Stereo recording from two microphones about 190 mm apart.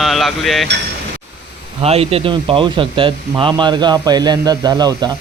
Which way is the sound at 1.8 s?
30° right (ahead or behind).